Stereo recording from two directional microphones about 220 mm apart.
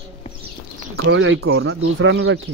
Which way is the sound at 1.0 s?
60° right (ahead or behind).